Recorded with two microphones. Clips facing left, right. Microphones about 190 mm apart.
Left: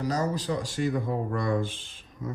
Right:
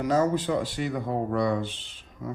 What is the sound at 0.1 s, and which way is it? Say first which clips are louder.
Speech: right 7 dB; 40° left (ahead or behind).